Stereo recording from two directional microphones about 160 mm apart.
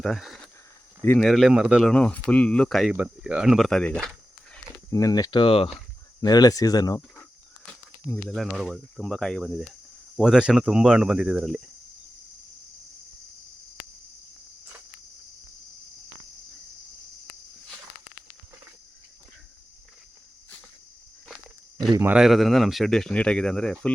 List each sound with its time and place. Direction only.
0.0 s speech: centre (ahead or behind)
1.9 s speech: 5° left (ahead or behind)
4.9 s speech: 20° left (ahead or behind)
6.2 s speech: 25° left (ahead or behind)
8.3 s speech: centre (ahead or behind)
22.1 s speech: centre (ahead or behind)